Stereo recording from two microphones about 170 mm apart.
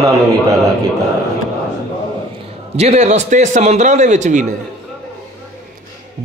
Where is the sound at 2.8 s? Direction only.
40° right (ahead or behind).